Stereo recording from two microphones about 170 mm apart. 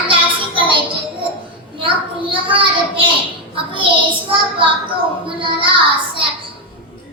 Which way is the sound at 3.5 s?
30° right (ahead or behind).